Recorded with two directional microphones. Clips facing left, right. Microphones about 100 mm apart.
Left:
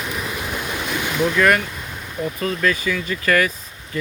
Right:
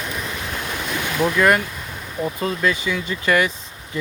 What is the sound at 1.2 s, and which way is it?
Speech, 20° right (ahead or behind).